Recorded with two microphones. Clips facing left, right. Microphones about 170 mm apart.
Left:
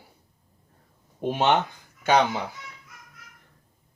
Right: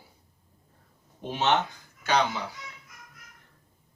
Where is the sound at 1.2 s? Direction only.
50° left (ahead or behind).